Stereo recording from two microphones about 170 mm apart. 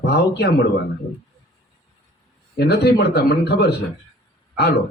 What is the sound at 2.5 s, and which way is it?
A man's voice, 75° left (ahead or behind).